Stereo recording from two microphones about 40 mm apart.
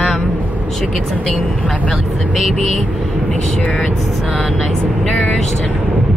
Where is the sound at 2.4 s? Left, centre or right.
Centre.